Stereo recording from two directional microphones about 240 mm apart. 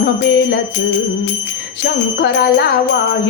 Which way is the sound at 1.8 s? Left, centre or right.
Left.